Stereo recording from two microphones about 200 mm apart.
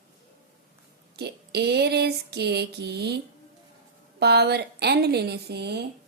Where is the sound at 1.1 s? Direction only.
55° right (ahead or behind).